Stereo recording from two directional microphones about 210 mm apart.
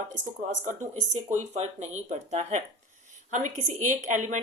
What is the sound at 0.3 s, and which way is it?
A woman's voice, 35° right (ahead or behind).